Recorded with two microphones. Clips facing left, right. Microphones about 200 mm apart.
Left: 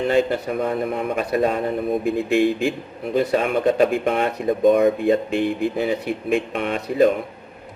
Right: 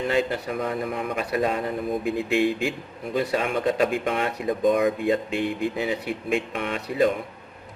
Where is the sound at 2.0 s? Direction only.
Centre (ahead or behind).